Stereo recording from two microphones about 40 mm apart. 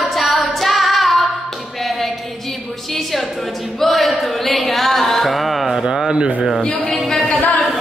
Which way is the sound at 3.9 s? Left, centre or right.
Centre.